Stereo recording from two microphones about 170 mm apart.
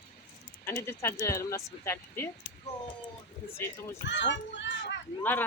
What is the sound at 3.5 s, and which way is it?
Speech, 15° left (ahead or behind).